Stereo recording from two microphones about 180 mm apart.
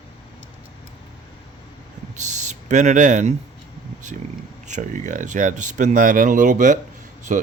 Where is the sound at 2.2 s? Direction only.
40° right (ahead or behind).